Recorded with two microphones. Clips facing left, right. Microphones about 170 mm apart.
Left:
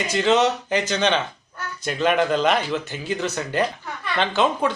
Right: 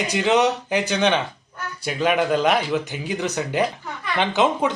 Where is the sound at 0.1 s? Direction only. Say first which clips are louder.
Left 1 dB; 15° right (ahead or behind).